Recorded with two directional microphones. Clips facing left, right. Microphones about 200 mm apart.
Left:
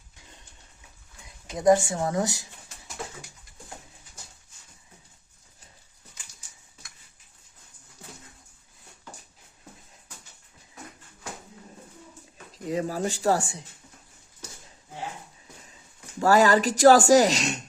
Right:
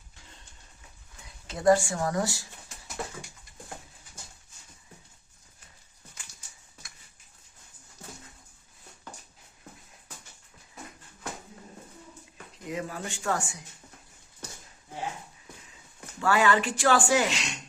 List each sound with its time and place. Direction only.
1.5 s speech: 20° left (ahead or behind)
12.6 s speech: 35° left (ahead or behind)
16.2 s speech: 40° left (ahead or behind)